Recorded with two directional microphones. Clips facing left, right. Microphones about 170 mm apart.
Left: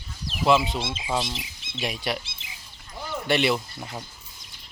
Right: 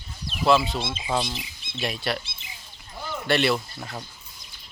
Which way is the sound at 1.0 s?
5° left (ahead or behind).